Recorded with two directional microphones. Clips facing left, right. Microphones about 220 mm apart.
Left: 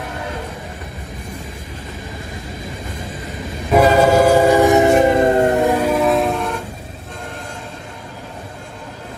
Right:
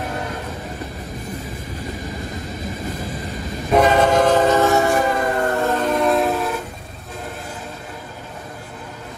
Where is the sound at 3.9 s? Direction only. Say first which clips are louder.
Left 3 dB; 10° left (ahead or behind); by 5.5 s 25° left (ahead or behind).